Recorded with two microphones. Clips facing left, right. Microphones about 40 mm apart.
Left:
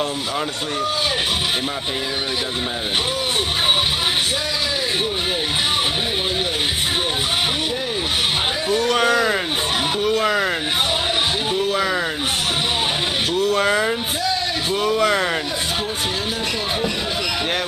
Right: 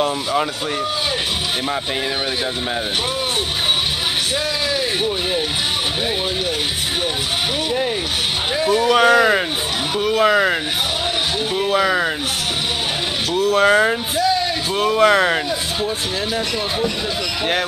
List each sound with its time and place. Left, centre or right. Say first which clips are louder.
8.6 s speech: right 5 dB; centre
13.4 s speech: right 4 dB; centre
13.7 s speech: right 4 dB; centre